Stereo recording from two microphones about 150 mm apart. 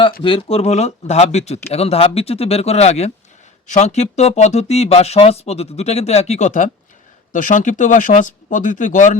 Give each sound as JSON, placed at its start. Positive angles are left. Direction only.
{"t": 0.2, "sound": "speech", "side_deg": 35}